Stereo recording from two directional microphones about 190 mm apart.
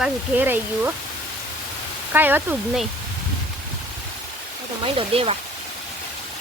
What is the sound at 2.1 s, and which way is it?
Speech, 10° right (ahead or behind).